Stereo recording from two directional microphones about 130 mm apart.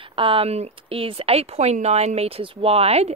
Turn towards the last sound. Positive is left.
turn(degrees=-50)  # may be behind; listen again after turning